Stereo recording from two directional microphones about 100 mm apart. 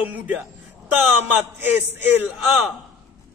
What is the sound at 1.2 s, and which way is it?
A woman's voice, 20° right (ahead or behind).